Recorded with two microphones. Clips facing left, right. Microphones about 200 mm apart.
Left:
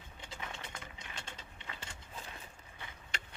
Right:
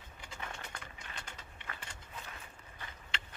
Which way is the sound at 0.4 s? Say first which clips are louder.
Right 1 dB; 20° left (ahead or behind).